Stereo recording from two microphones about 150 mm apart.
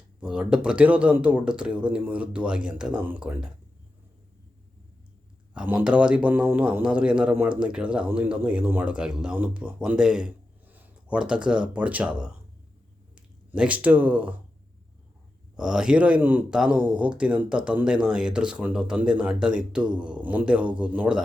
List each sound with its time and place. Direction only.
0.2 s a man's voice: 5° right (ahead or behind)
5.5 s a man's voice: 10° right (ahead or behind)
15.5 s a man's voice: 5° right (ahead or behind)